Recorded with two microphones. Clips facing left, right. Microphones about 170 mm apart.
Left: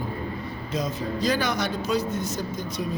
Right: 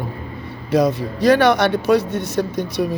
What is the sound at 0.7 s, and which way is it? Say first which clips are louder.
A man's voice: right 12 dB; 70° right (ahead or behind).